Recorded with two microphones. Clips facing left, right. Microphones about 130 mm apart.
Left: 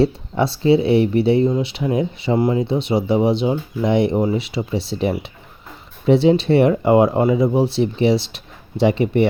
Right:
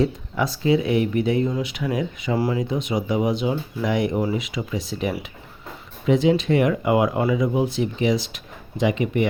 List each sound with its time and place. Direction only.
0.0 s speech: 30° left (ahead or behind)